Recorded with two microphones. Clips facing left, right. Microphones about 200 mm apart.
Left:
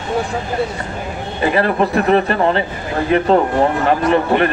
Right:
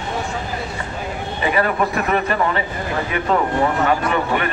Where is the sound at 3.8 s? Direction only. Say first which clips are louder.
Left 5 dB; 35° left (ahead or behind).